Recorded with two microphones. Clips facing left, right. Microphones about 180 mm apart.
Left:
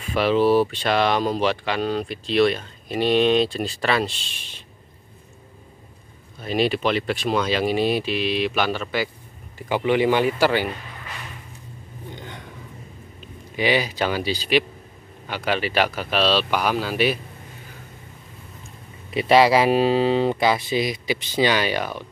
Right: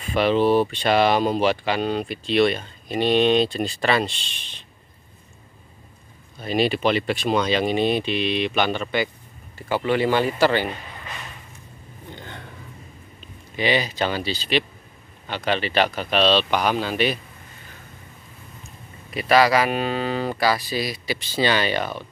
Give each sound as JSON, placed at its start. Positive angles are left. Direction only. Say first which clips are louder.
{"t": 0.0, "sound": "speech", "louder": "even", "side_deg": 0}
{"t": 6.4, "sound": "speech", "louder": "right 1 dB", "side_deg": 0}
{"t": 9.6, "sound": "speech", "louder": "left 1 dB", "side_deg": 15}
{"t": 12.2, "sound": "a sound", "louder": "left 1 dB", "side_deg": 15}
{"t": 13.6, "sound": "speech", "louder": "left 1 dB", "side_deg": 10}
{"t": 19.0, "sound": "speech", "louder": "left 2 dB", "side_deg": 25}